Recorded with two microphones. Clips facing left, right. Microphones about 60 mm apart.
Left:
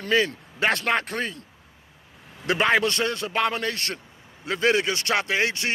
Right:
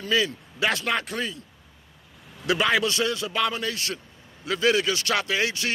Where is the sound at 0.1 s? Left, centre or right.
Left.